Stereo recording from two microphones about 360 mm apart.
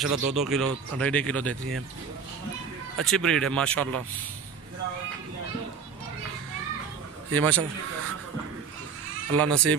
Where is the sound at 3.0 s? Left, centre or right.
Centre.